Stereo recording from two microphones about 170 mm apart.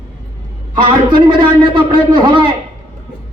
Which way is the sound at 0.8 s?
30° right (ahead or behind).